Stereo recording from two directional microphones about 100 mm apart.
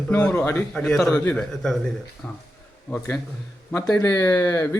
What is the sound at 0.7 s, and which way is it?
Speech, 5° left (ahead or behind).